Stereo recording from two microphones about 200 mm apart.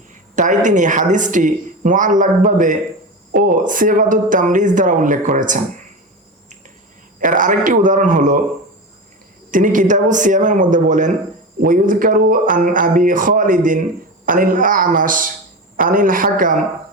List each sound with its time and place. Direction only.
0.3 s a woman's voice: 40° right (ahead or behind)
7.2 s a woman's voice: 40° right (ahead or behind)
9.5 s a woman's voice: 40° right (ahead or behind)